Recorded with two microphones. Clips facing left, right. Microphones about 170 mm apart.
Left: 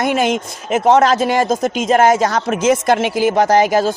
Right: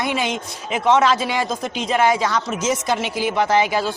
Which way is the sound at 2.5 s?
55° left (ahead or behind).